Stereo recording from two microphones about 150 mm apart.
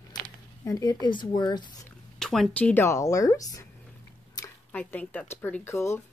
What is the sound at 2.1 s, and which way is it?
Speech, 5° left (ahead or behind).